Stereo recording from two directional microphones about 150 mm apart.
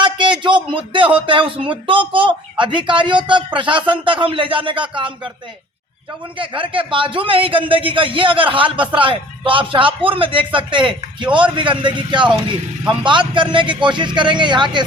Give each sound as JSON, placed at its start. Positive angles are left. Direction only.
{"t": 0.0, "sound": "a man's voice", "side_deg": -30}
{"t": 6.3, "sound": "speech", "side_deg": -35}